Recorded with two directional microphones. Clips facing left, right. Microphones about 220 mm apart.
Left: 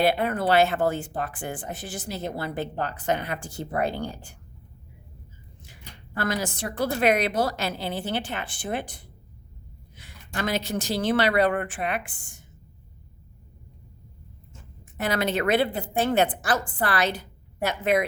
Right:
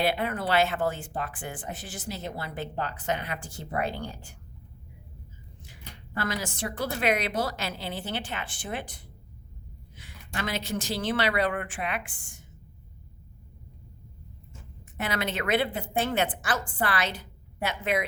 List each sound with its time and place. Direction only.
0.0 s a woman's voice: 45° left (ahead or behind)
6.1 s a woman's voice: 45° left (ahead or behind)
10.0 s a woman's voice: 45° left (ahead or behind)
14.9 s a woman's voice: 40° left (ahead or behind)